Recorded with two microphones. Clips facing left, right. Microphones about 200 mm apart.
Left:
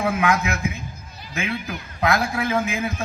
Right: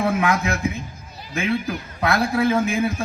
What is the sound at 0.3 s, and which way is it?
Speech, 35° right (ahead or behind).